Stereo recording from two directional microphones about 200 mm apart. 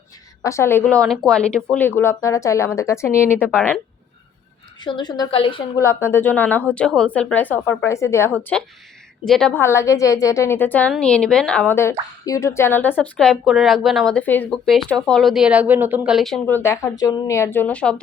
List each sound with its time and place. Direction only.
0.4 s a woman's voice: 15° left (ahead or behind)
4.8 s a woman's voice: 20° left (ahead or behind)
5.8 s a woman's voice: 15° left (ahead or behind)